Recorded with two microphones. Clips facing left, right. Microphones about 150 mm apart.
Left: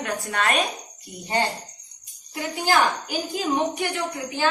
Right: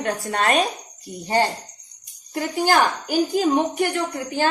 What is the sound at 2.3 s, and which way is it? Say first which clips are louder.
A woman's voice: right 3 dB; 45° right (ahead or behind).